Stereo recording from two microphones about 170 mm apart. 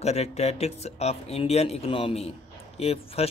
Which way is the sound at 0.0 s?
40° left (ahead or behind).